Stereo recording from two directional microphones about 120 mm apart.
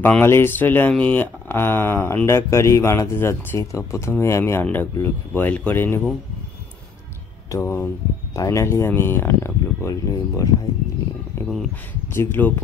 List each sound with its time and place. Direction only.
0.0 s speech: 15° left (ahead or behind)
7.5 s speech: 25° left (ahead or behind)
12.1 s speech: 20° left (ahead or behind)